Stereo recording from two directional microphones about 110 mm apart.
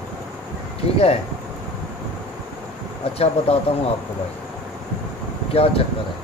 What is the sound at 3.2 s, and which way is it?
Speech, 65° left (ahead or behind).